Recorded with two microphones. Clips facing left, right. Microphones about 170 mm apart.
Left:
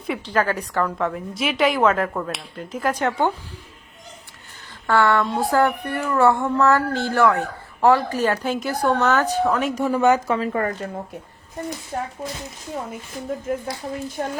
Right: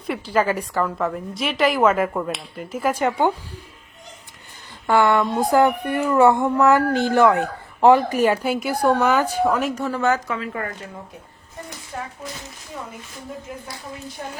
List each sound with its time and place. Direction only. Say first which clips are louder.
0.1 s a child's voice: right 1 dB; 10° right (ahead or behind)
4.9 s a child's voice: right 1 dB; 15° right (ahead or behind)
9.7 s a woman's voice: left 3 dB; 15° left (ahead or behind)
10.2 s speech: left 6 dB; 35° left (ahead or behind)
14.2 s speech: left 7 dB; 50° left (ahead or behind)